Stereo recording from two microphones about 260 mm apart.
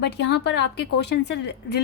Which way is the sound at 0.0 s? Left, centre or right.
Left.